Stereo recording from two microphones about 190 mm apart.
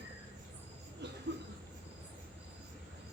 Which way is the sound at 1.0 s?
65° right (ahead or behind).